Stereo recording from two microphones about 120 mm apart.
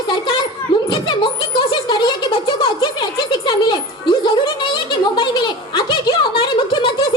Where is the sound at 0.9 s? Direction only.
40° left (ahead or behind).